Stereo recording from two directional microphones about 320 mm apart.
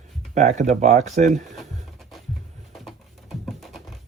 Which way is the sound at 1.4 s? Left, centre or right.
Centre.